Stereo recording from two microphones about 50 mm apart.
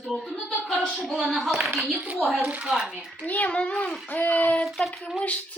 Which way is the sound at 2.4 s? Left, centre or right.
Right.